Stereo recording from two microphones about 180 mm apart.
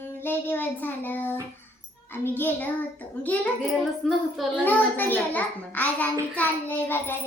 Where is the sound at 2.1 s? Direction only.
10° left (ahead or behind).